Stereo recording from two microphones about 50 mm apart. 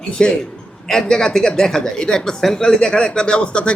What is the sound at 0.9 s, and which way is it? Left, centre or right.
A man's voice, centre.